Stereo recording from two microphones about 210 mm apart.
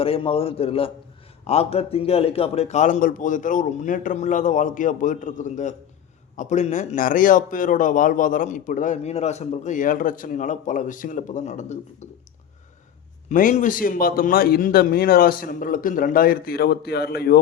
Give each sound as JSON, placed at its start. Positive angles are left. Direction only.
{"t": 0.0, "sound": "a man's voice", "side_deg": 25}
{"t": 13.2, "sound": "a man's voice", "side_deg": 40}